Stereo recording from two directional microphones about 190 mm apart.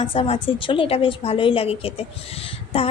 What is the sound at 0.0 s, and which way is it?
A woman's voice, 30° left (ahead or behind).